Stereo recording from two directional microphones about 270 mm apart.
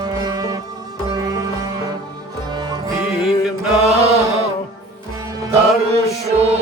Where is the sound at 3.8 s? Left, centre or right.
Right.